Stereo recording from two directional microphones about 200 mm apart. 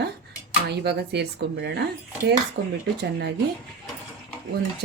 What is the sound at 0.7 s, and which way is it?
Speech, 55° right (ahead or behind).